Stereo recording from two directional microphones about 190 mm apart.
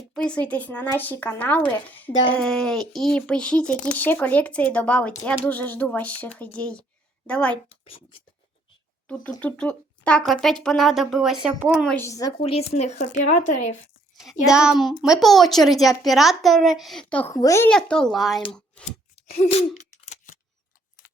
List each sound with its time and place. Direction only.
0.1 s a child's voice: 5° left (ahead or behind)
7.7 s a child's voice: 30° left (ahead or behind)
9.0 s a child's voice: 5° left (ahead or behind)
11.9 s speech: 15° left (ahead or behind)
12.4 s speech: 30° left (ahead or behind)
13.0 s speech: 60° left (ahead or behind)
14.4 s a child's voice: 5° right (ahead or behind); by 17.7 s 15° left (ahead or behind)
17.7 s a child's voice: 5° left (ahead or behind)
18.5 s a sound: 5° left (ahead or behind)
19.1 s a sound: 30° left (ahead or behind)